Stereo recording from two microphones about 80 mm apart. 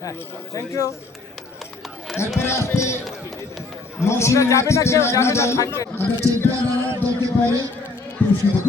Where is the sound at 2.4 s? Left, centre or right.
Left.